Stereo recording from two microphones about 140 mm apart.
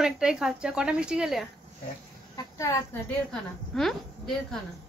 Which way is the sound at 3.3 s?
Centre (ahead or behind).